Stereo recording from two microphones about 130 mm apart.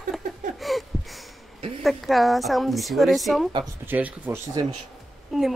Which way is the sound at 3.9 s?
15° right (ahead or behind).